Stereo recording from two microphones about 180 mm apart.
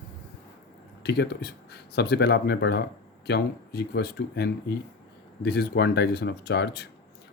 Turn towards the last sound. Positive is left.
turn(degrees=70)  # may be behind; listen again after turning